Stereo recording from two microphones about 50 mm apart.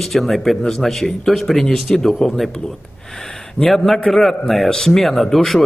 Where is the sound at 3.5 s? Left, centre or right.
Centre.